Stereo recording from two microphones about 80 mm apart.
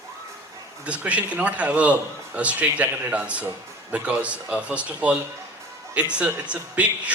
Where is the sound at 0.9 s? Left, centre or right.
Centre.